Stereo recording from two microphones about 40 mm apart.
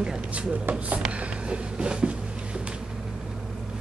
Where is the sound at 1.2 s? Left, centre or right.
Right.